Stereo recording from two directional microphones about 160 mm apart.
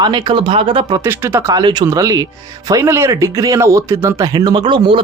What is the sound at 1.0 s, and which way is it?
Speech, 15° right (ahead or behind).